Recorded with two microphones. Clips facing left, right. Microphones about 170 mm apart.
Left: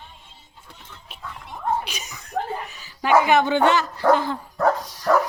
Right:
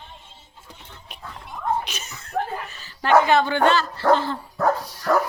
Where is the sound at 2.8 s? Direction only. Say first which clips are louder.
Right 1 dB; 15° left (ahead or behind).